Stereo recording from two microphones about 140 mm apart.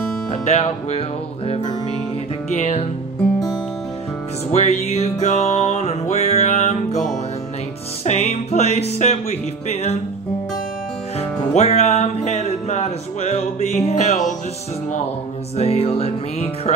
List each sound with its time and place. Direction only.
0.3 s music: 50° left (ahead or behind)
2.5 s music: 50° left (ahead or behind)
4.5 s music: 50° left (ahead or behind)
11.1 s music: 50° left (ahead or behind)
15.5 s music: 45° left (ahead or behind)